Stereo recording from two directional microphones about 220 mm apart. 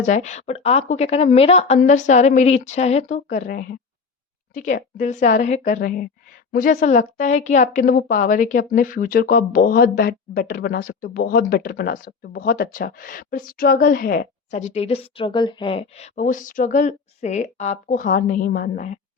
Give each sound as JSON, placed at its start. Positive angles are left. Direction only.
{"t": 0.0, "sound": "speech", "side_deg": 35}